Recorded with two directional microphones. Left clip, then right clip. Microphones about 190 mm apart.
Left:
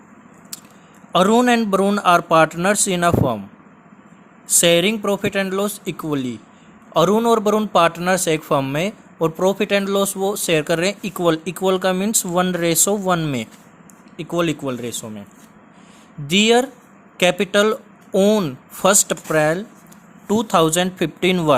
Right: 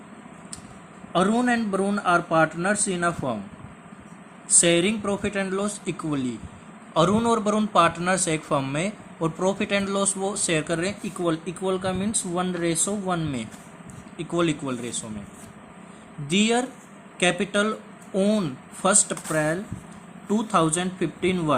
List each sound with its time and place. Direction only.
1.1 s speech: 60° left (ahead or behind)
4.4 s speech: 55° left (ahead or behind)
16.2 s speech: 55° left (ahead or behind)